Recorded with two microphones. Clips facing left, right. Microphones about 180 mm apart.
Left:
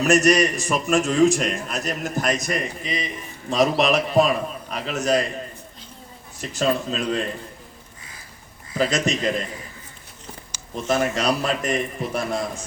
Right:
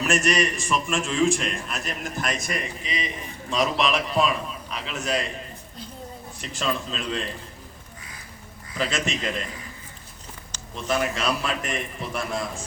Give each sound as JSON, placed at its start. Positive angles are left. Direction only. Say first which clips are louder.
{"t": 0.0, "sound": "a man's voice", "louder": "left 6 dB", "side_deg": 40}
{"t": 6.4, "sound": "a man's voice", "louder": "left 6 dB", "side_deg": 40}
{"t": 8.8, "sound": "a man's voice", "louder": "left 5 dB", "side_deg": 40}
{"t": 10.8, "sound": "a man's voice", "louder": "left 4 dB", "side_deg": 40}